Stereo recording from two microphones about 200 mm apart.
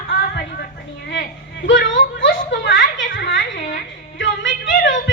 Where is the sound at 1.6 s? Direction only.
65° left (ahead or behind).